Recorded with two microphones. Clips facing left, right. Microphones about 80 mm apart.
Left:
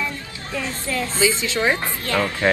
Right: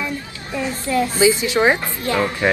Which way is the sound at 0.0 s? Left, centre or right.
Centre.